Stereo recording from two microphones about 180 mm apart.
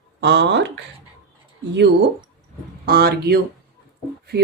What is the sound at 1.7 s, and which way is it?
Speech, 70° right (ahead or behind).